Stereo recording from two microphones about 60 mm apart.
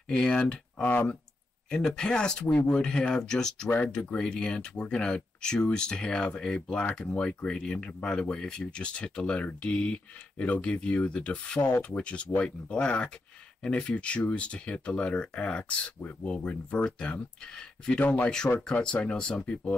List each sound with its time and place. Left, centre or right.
0.1 s speech: centre
18.0 s speech: left
18.6 s speech: centre